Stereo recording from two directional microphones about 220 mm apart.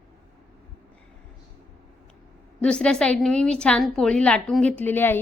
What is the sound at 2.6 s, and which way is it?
A woman's voice, 5° left (ahead or behind).